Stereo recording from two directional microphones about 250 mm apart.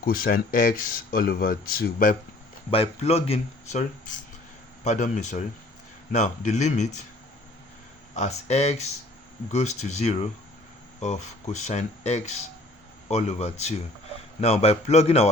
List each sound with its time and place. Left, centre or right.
0.0 s speech: left
2.6 s speech: left
8.1 s speech: left